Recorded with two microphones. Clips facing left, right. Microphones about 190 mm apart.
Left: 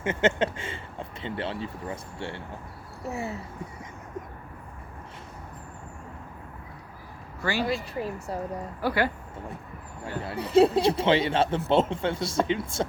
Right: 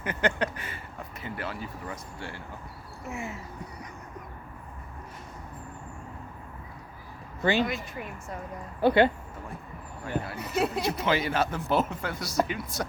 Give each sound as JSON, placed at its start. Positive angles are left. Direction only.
{"t": 0.0, "sound": "speech", "side_deg": 25}
{"t": 7.4, "sound": "speech", "side_deg": -20}
{"t": 7.9, "sound": "speech", "side_deg": 30}
{"t": 8.8, "sound": "speech", "side_deg": -25}
{"t": 10.2, "sound": "speech", "side_deg": 30}